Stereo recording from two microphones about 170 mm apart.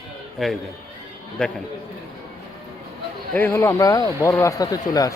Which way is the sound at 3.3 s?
15° left (ahead or behind).